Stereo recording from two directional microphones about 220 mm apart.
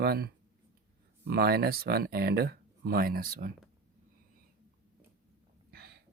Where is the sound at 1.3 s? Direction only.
45° right (ahead or behind).